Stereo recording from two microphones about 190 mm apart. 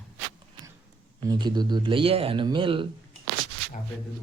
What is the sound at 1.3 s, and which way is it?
Speech, 25° right (ahead or behind).